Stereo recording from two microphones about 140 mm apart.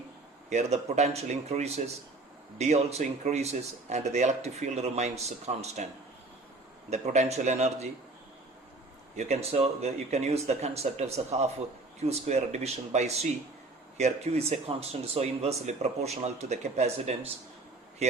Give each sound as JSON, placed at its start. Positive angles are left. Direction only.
{"t": 0.5, "sound": "speech", "side_deg": -55}
{"t": 6.9, "sound": "speech", "side_deg": -55}
{"t": 9.1, "sound": "speech", "side_deg": -50}